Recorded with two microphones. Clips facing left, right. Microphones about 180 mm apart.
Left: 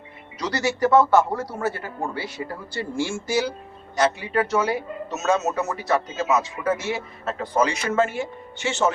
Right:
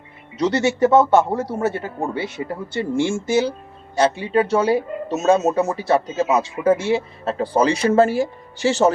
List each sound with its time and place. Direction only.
0.3 s a man's voice: 25° right (ahead or behind)